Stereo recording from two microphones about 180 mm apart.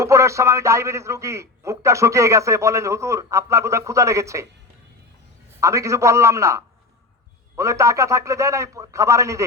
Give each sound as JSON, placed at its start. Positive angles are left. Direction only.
{"t": 0.0, "sound": "a man's voice", "side_deg": -15}
{"t": 5.5, "sound": "a man's voice", "side_deg": -15}